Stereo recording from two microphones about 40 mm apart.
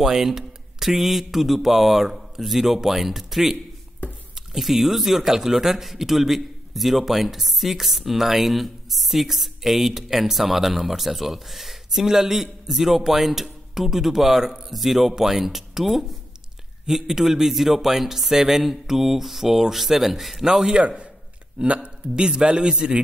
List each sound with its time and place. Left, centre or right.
0.0 s a man's voice: centre
20.4 s a man's voice: centre
21.5 s a man's voice: right